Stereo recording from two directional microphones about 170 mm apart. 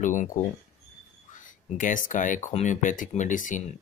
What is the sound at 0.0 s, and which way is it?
Speech, 50° left (ahead or behind).